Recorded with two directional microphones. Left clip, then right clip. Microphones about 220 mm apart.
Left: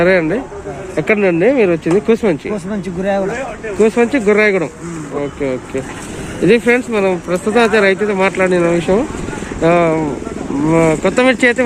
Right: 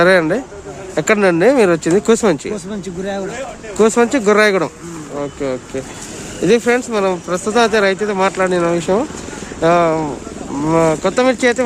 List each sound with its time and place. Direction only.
0.0 s speech: 20° right (ahead or behind)
3.0 s speech: centre (ahead or behind)
3.8 s speech: 20° right (ahead or behind)
5.4 s speech: 5° right (ahead or behind)